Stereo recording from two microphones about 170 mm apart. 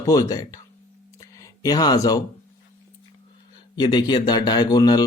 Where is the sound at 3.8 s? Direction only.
25° left (ahead or behind).